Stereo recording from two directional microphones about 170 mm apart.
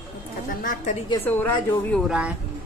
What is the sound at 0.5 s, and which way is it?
Speech, 55° left (ahead or behind).